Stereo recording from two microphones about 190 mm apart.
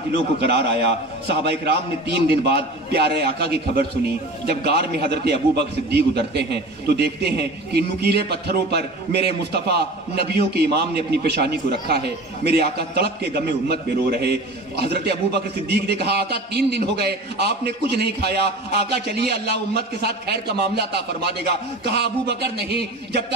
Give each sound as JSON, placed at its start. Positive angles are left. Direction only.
{"t": 0.4, "sound": "a man's voice", "side_deg": -60}